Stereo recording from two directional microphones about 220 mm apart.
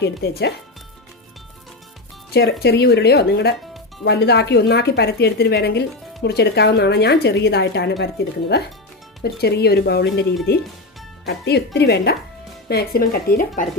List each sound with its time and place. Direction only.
0.0 s a woman's voice: 50° left (ahead or behind)
2.3 s a woman's voice: 45° left (ahead or behind)